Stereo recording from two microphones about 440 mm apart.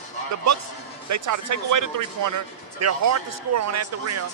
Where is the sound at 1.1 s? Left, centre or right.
Right.